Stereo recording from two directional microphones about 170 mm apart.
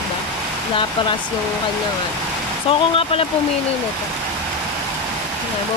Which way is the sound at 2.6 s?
30° left (ahead or behind).